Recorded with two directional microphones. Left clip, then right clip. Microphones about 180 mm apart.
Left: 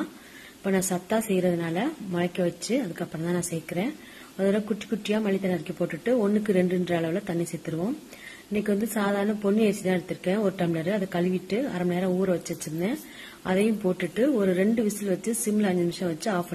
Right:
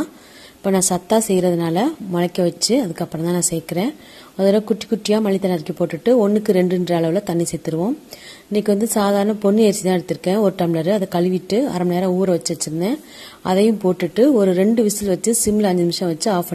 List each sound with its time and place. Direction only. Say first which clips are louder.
0.7 s a woman's voice: right 9 dB; 40° right (ahead or behind)
6.1 s a woman's voice: right 8 dB; 30° right (ahead or behind)
6.5 s a woman's voice: right 8 dB; 40° right (ahead or behind)